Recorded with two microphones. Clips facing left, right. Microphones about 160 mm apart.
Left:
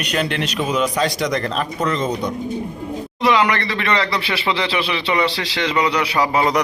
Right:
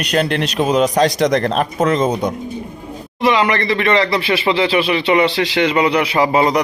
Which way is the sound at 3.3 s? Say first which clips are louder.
Right 2 dB; 40° right (ahead or behind).